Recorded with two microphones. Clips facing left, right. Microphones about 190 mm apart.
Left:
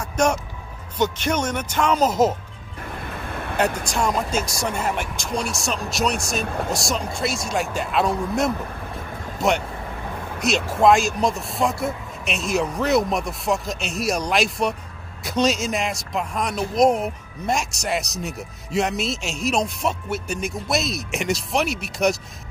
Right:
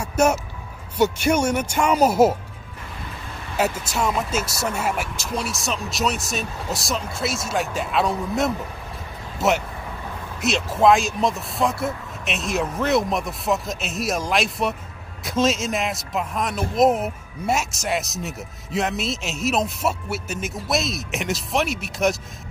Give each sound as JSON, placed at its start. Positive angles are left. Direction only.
{"t": 0.0, "sound": "speech", "side_deg": -5}
{"t": 3.1, "sound": "vehicle", "side_deg": 60}
{"t": 3.9, "sound": "speech", "side_deg": -5}
{"t": 6.4, "sound": "speech", "side_deg": 55}
{"t": 6.7, "sound": "speech", "side_deg": 0}
{"t": 10.4, "sound": "speech", "side_deg": 0}